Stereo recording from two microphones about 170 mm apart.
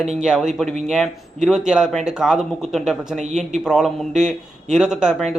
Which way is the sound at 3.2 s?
45° right (ahead or behind).